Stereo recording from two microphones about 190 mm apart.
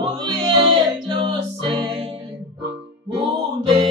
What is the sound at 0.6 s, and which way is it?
Music, 25° right (ahead or behind).